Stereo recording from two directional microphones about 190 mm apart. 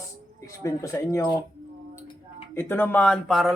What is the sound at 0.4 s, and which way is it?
Speech, 15° left (ahead or behind).